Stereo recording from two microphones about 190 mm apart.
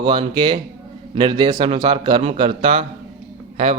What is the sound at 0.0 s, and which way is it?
Speech, 25° right (ahead or behind).